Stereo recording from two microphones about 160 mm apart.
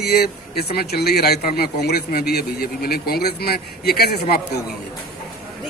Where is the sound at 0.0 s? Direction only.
80° left.